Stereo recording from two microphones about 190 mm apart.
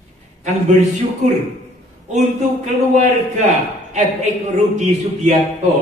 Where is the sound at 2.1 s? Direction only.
40° right (ahead or behind).